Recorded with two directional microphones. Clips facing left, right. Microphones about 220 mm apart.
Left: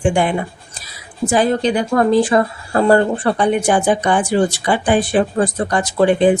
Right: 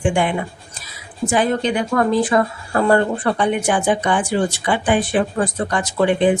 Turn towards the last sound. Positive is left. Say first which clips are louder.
# left 3 dB
turn(degrees=35)  # may be behind; listen again after turning